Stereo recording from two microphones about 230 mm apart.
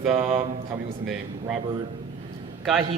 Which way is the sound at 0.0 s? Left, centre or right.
Centre.